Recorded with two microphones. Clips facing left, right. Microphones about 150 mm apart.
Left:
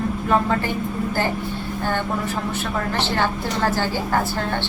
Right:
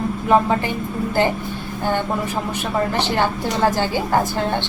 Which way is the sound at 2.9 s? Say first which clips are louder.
Right 2 dB; 15° right (ahead or behind).